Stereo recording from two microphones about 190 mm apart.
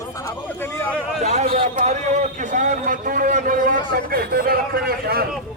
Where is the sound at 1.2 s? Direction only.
35° right (ahead or behind); by 5.2 s 50° right (ahead or behind).